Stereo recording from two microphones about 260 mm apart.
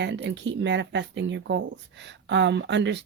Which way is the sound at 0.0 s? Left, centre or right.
Right.